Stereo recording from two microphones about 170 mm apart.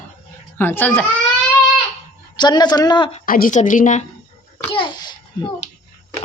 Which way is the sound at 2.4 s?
25° left (ahead or behind).